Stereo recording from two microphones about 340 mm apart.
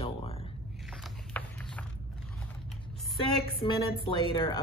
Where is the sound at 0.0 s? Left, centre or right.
Centre.